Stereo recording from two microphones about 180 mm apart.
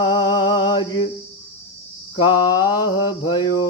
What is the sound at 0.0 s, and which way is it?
Music, 25° left (ahead or behind).